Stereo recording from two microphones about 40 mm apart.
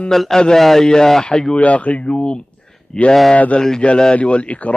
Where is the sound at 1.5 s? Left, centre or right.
Left.